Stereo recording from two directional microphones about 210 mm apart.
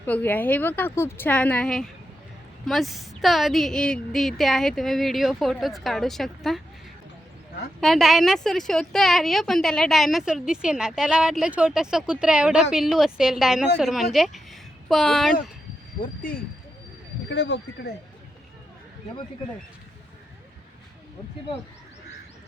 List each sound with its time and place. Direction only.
0.0 s a woman's voice: 10° left (ahead or behind)
7.8 s a woman's voice: centre (ahead or behind)
16.0 s speech: 40° left (ahead or behind)
17.2 s speech: 55° left (ahead or behind)